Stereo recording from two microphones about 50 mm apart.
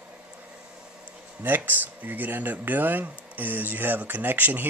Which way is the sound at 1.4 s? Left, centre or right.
Right.